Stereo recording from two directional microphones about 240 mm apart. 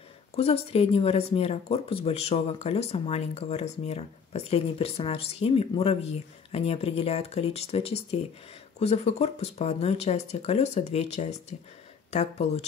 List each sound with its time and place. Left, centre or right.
0.4 s speech: left